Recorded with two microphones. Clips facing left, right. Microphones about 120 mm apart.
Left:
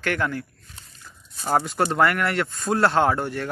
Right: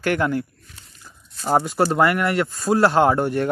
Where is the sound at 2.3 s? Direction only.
5° right (ahead or behind).